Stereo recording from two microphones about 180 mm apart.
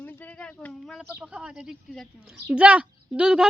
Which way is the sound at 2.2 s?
5° right (ahead or behind).